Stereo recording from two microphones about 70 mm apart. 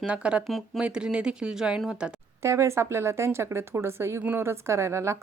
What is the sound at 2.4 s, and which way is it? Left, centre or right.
A woman's voice, right.